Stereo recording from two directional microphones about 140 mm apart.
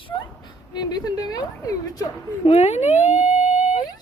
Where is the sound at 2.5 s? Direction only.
50° left (ahead or behind).